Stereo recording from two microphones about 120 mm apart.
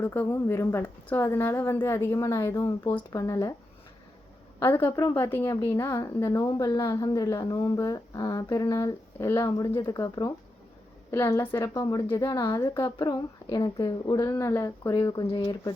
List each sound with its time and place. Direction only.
0.0 s a woman's voice: 15° left (ahead or behind)
4.6 s a woman's voice: 20° left (ahead or behind); by 12.5 s 35° left (ahead or behind)
12.5 s a woman's voice: 25° left (ahead or behind)